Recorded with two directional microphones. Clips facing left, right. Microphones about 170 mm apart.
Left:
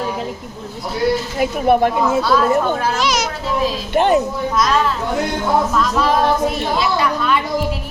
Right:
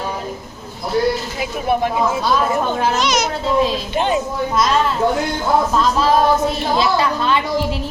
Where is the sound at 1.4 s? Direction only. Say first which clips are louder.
Left 5 dB; 50° left (ahead or behind).